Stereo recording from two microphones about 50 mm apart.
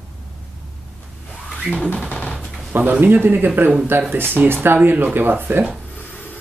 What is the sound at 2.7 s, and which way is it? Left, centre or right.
A man's voice, right.